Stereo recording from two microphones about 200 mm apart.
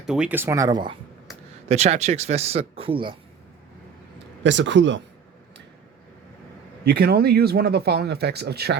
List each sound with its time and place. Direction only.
0.0 s speech: 5° right (ahead or behind); by 0.9 s 20° right (ahead or behind)
1.6 s speech: 35° right (ahead or behind)
4.4 s speech: 65° right (ahead or behind)
6.8 s speech: 55° right (ahead or behind)